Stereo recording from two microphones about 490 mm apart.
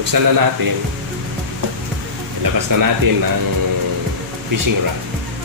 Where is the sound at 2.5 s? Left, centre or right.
Right.